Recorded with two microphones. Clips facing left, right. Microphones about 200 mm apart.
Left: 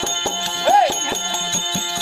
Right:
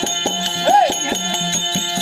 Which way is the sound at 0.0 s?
25° right (ahead or behind).